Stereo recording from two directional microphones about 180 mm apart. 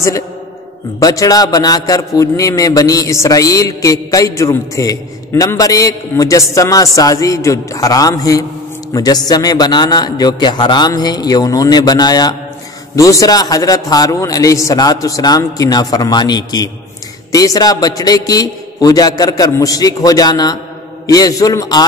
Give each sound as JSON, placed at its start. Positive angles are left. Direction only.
{"t": 0.9, "sound": "a man's voice", "side_deg": 20}